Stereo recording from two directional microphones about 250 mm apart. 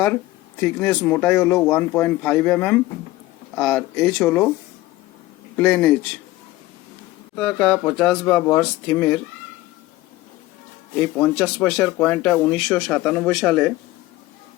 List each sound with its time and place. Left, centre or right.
0.6 s speech: centre
5.5 s speech: centre
7.3 s speech: centre
11.2 s speech: centre